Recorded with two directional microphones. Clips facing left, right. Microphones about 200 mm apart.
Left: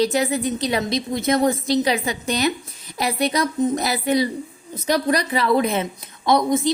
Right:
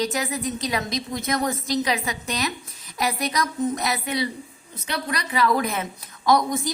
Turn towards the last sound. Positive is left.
turn(degrees=25)  # may be behind; listen again after turning